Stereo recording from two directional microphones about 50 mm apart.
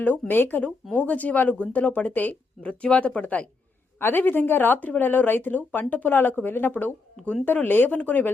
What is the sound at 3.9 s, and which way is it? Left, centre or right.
Speech, left.